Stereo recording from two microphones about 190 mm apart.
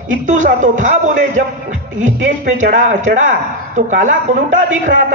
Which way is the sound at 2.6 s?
40° right (ahead or behind).